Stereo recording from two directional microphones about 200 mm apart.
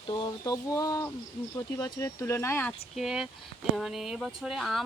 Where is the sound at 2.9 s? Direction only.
Centre (ahead or behind).